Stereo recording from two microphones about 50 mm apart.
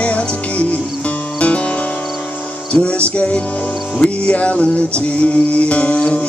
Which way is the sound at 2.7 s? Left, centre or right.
Left.